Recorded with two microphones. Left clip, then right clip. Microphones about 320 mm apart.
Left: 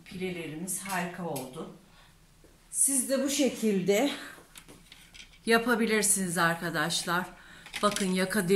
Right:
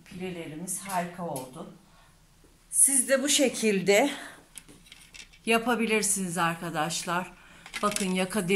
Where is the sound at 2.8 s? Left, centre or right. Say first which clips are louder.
Right 4 dB; right.